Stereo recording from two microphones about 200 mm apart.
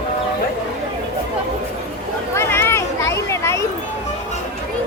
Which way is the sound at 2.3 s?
15° left (ahead or behind).